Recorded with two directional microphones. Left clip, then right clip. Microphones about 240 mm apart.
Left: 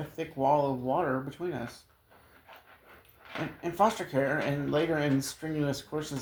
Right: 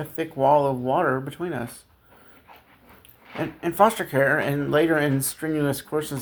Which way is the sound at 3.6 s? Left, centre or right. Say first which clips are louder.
Right 8 dB; right.